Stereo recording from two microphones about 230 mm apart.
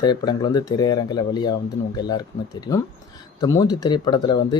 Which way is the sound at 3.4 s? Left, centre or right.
Centre.